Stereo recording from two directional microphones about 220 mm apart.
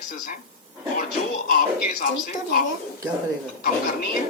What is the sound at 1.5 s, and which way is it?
Speech, 40° left (ahead or behind).